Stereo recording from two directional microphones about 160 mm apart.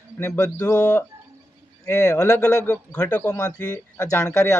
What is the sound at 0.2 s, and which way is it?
Speech, 20° left (ahead or behind).